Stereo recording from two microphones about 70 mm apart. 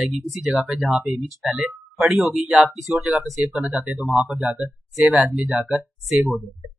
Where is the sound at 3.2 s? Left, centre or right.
Centre.